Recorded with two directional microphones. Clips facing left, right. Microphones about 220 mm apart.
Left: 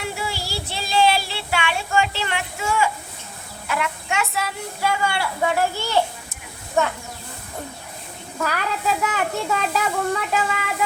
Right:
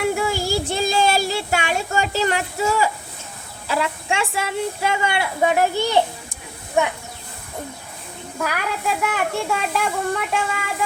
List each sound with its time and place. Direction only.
0.1 s child singing: 50° right (ahead or behind)
3.7 s speech: 30° right (ahead or behind)
8.4 s a child's voice: 5° right (ahead or behind)